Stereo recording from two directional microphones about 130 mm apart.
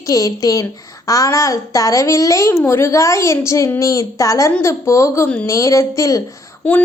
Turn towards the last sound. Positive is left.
turn(degrees=10)  # may be behind; listen again after turning